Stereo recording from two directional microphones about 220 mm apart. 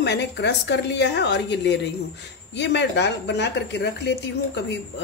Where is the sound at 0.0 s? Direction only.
50° left (ahead or behind).